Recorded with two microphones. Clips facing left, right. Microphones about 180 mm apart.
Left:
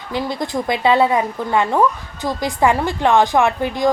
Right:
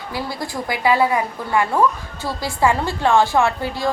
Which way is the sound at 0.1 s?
20° left (ahead or behind).